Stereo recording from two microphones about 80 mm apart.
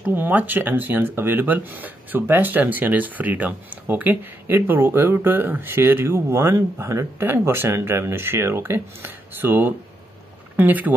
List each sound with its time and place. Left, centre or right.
0.0 s speech: right